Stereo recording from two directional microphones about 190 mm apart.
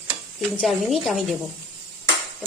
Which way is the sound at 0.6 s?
Centre (ahead or behind).